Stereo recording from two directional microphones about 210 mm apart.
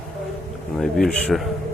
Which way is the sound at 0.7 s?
Centre (ahead or behind).